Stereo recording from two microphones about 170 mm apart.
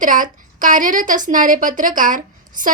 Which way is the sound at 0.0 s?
50° right (ahead or behind).